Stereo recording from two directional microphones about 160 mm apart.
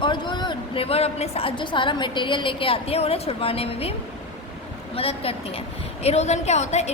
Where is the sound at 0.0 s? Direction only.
30° left (ahead or behind).